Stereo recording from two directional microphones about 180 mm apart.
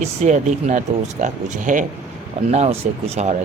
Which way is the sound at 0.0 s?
40° right (ahead or behind).